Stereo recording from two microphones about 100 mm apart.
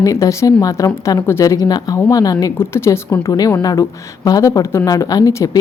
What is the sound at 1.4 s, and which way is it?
A woman's voice, 40° left (ahead or behind).